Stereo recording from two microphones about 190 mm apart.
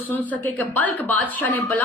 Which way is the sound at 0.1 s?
10° left (ahead or behind).